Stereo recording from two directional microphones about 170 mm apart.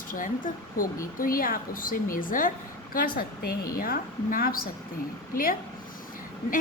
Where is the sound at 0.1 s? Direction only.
50° left (ahead or behind).